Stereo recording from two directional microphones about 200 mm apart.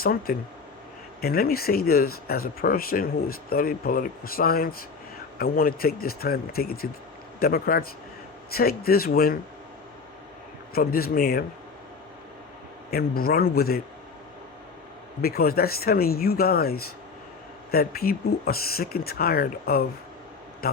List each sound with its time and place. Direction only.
0.0 s speech: 50° left (ahead or behind)
10.8 s speech: 50° left (ahead or behind)
12.9 s speech: 50° left (ahead or behind)
15.2 s speech: 50° left (ahead or behind)